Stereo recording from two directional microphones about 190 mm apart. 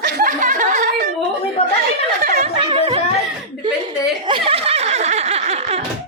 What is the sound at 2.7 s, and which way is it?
Speech, 30° right (ahead or behind).